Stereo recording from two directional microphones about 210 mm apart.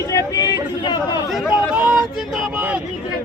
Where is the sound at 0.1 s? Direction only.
15° left (ahead or behind).